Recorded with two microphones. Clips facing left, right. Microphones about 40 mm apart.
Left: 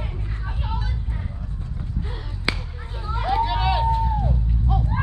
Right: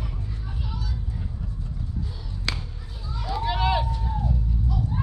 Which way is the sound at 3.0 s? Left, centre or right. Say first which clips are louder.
Left 8 dB; left.